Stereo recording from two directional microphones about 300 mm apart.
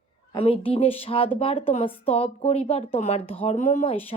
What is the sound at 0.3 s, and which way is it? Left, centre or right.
Speech, centre.